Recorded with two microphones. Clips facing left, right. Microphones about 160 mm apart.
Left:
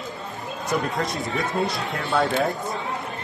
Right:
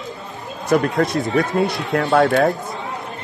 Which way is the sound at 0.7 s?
75° right (ahead or behind).